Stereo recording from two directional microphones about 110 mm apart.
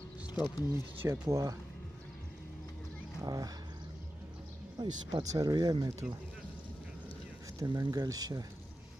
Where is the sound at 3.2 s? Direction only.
35° right (ahead or behind).